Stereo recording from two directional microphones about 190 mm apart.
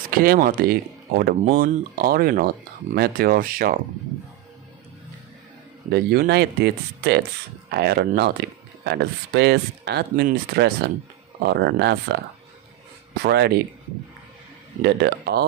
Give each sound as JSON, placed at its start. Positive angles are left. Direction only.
{"t": 0.1, "sound": "speech", "side_deg": -50}
{"t": 5.9, "sound": "speech", "side_deg": -55}
{"t": 13.2, "sound": "speech", "side_deg": -55}
{"t": 14.8, "sound": "speech", "side_deg": -60}